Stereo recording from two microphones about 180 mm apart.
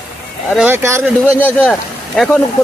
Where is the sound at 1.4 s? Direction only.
10° left (ahead or behind).